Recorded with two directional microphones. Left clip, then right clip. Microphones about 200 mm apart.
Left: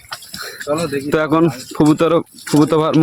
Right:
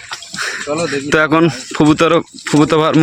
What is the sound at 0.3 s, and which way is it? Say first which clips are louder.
Speech: right 2 dB; 5° left (ahead or behind).